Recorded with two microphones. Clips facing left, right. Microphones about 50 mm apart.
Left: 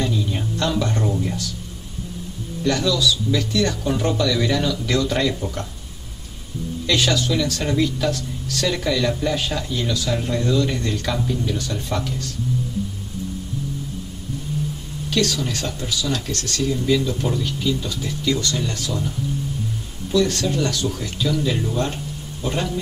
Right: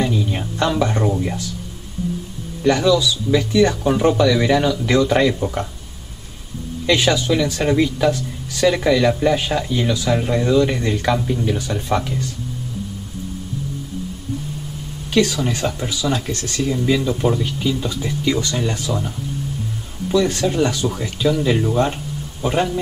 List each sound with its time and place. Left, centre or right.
0.0 s music: centre
2.6 s speech: centre
6.9 s speech: centre
15.0 s speech: centre